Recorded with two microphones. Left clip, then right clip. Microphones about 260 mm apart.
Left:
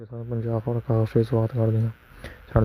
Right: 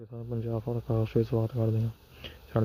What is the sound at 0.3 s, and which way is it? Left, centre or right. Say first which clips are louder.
Speech: left 6 dB; left.